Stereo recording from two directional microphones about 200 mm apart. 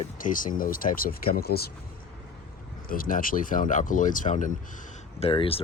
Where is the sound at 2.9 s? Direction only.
45° left (ahead or behind).